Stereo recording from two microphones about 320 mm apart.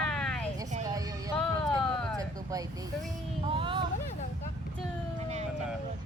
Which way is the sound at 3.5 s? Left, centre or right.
Centre.